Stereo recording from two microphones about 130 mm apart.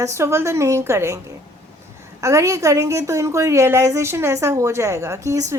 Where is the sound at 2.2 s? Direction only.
20° right (ahead or behind).